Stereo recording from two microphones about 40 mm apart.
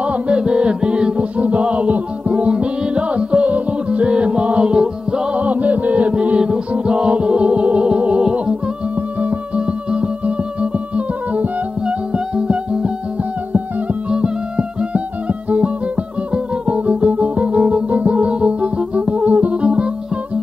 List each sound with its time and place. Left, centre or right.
0.0 s music: right
5.4 s music: right
8.2 s humming: right
9.8 s music: right
14.1 s music: right
19.5 s music: right